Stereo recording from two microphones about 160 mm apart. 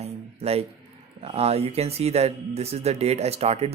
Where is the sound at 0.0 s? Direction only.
40° right (ahead or behind).